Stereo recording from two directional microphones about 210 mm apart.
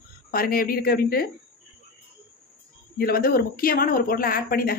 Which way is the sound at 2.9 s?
45° left (ahead or behind).